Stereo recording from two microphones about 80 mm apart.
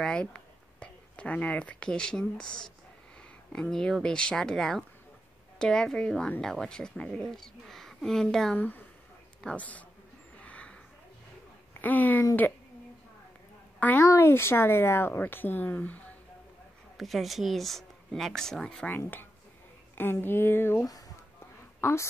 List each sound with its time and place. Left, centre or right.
0.0 s a woman's voice: centre
8.5 s speech: left
10.4 s a sound: centre
11.8 s speech: left
13.7 s a woman's voice: left
16.9 s a woman's voice: centre
18.9 s speech: left